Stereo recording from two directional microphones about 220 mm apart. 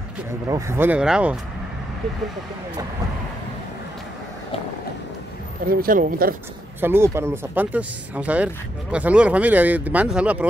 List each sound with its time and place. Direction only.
0.5 s speech: 15° right (ahead or behind)
5.7 s speech: 40° right (ahead or behind)
6.8 s speech: 10° right (ahead or behind)